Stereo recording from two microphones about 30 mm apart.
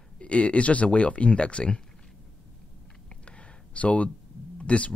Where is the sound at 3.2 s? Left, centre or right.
Left.